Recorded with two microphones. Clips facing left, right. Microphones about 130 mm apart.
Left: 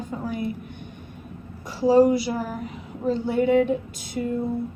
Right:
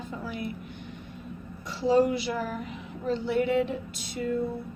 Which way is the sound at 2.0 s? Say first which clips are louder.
Left 7 dB; 40° left (ahead or behind).